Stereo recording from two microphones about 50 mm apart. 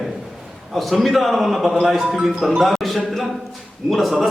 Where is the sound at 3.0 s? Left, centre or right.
Centre.